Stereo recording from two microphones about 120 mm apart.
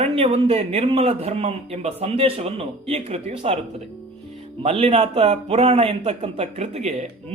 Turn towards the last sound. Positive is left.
turn(degrees=-65)  # may be behind; listen again after turning